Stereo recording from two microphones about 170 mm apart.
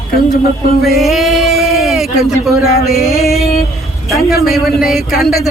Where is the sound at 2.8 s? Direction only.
Centre (ahead or behind).